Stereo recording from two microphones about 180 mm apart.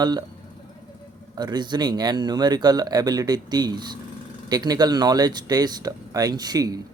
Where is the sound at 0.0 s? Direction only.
20° right (ahead or behind).